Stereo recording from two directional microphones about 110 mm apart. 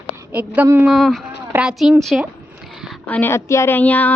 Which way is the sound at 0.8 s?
Centre (ahead or behind).